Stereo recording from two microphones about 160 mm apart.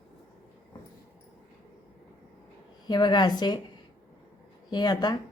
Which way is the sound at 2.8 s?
25° left (ahead or behind).